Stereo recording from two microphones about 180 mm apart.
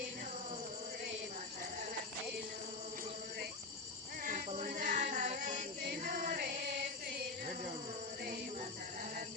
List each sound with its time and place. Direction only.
4.2 s music: 50° right (ahead or behind)